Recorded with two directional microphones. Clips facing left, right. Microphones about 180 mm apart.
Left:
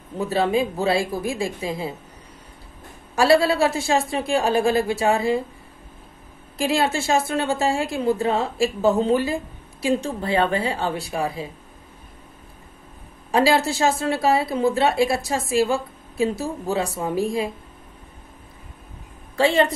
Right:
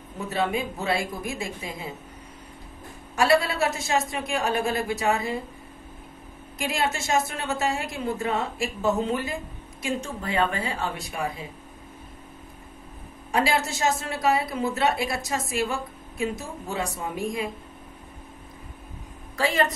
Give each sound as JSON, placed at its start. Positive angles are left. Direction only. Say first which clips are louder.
{"t": 0.3, "sound": "a woman's voice", "louder": "left 6 dB", "side_deg": 30}
{"t": 3.2, "sound": "a woman's voice", "louder": "left 5 dB", "side_deg": 30}
{"t": 6.6, "sound": "a woman's voice", "louder": "left 6 dB", "side_deg": 30}
{"t": 13.3, "sound": "a woman's voice", "louder": "left 6 dB", "side_deg": 30}
{"t": 19.3, "sound": "a woman's voice", "louder": "left 6 dB", "side_deg": 30}